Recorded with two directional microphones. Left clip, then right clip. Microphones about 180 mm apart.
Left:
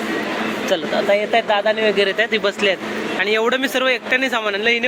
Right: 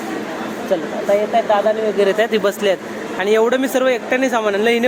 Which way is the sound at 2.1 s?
20° right (ahead or behind).